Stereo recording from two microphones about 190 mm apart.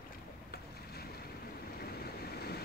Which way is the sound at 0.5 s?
55° left (ahead or behind).